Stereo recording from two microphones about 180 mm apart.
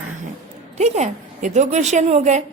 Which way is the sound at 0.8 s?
40° right (ahead or behind).